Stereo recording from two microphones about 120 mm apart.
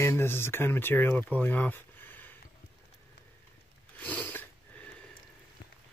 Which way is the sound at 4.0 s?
15° left (ahead or behind).